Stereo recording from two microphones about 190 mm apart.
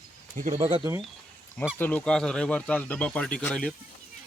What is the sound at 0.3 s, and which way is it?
Speech, 40° right (ahead or behind).